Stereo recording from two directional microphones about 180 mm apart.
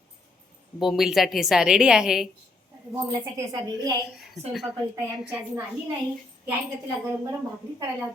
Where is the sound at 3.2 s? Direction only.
20° right (ahead or behind).